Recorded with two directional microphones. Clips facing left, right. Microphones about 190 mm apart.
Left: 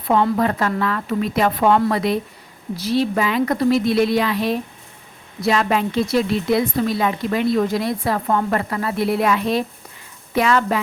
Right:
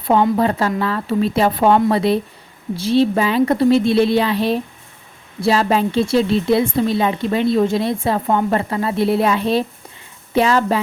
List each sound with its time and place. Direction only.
0.3 s a woman's voice: 30° right (ahead or behind)